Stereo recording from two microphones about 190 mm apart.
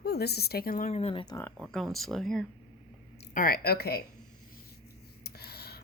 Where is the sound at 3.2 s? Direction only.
50° left (ahead or behind).